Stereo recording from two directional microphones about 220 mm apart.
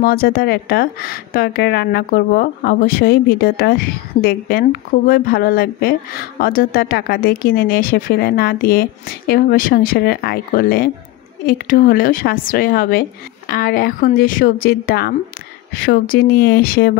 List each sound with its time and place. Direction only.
0.0 s a woman's voice: 45° left (ahead or behind)